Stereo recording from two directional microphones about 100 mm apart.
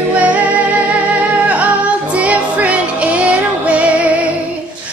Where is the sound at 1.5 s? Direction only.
15° right (ahead or behind).